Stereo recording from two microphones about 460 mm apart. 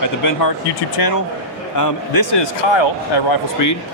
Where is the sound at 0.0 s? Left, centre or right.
Left.